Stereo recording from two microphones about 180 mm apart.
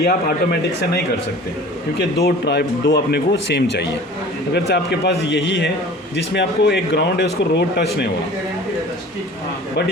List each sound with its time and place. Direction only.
0.0 s speech: 55° left (ahead or behind)
2.0 s speech: 65° left (ahead or behind)
5.3 s speech: 80° left